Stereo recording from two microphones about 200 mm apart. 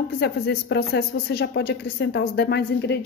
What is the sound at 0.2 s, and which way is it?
A woman's voice, 55° left (ahead or behind).